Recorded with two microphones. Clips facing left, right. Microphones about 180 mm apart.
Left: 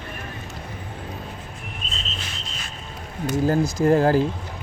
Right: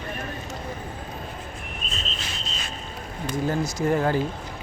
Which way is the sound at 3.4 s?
40° left (ahead or behind).